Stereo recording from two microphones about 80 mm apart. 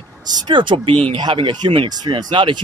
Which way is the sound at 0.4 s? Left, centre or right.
Right.